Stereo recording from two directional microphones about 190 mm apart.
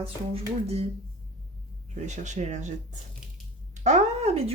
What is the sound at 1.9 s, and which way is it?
Speech, 40° right (ahead or behind).